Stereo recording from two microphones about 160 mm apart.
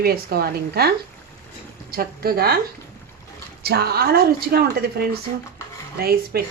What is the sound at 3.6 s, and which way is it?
Speech, 80° right.